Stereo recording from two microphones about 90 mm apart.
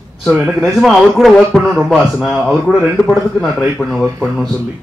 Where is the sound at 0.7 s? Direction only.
Centre (ahead or behind).